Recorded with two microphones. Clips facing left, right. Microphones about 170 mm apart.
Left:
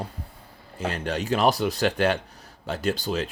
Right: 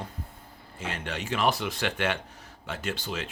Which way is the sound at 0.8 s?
35° left (ahead or behind).